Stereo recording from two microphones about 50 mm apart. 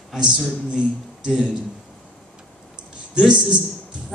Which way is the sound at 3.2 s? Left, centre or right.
Centre.